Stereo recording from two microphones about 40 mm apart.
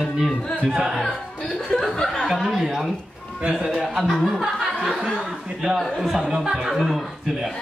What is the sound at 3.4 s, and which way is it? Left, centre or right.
Speech, right.